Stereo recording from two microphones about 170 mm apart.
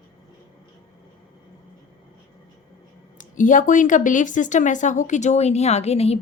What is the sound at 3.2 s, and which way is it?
Speech, 50° left (ahead or behind).